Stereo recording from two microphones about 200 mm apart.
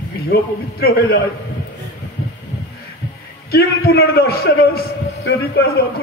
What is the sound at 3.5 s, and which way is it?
Speech, 50° left (ahead or behind).